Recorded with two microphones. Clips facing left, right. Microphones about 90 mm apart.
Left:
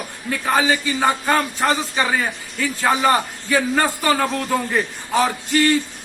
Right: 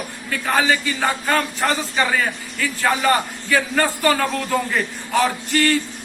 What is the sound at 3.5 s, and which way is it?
A man's voice, 20° left (ahead or behind).